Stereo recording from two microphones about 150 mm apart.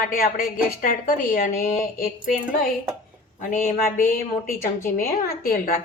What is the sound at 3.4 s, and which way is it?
Speech, 65° left (ahead or behind).